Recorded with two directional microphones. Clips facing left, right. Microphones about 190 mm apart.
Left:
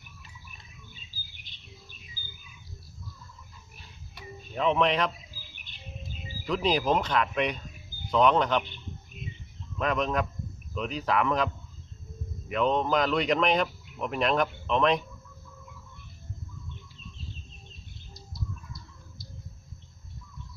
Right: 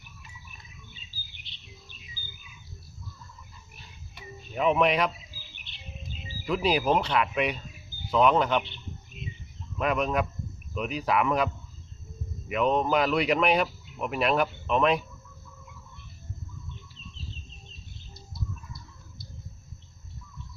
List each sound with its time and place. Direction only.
1.5 s chirp: 45° left (ahead or behind)
4.5 s speech: 10° right (ahead or behind)
5.7 s music: 45° left (ahead or behind)
6.4 s speech: 10° right (ahead or behind)
9.7 s speech: 10° right (ahead or behind)